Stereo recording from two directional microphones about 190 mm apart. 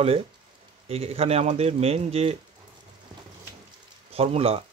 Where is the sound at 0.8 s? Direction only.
30° right (ahead or behind).